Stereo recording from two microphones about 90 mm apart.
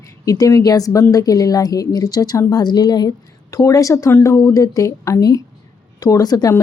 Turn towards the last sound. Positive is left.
turn(degrees=40)  # may be behind; listen again after turning